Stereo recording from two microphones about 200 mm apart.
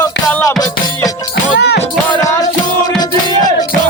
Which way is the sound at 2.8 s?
20° left (ahead or behind).